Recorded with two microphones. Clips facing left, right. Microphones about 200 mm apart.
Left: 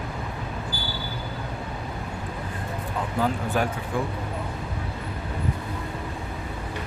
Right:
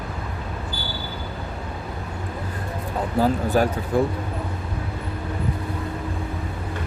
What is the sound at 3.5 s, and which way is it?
Speech, 35° right (ahead or behind).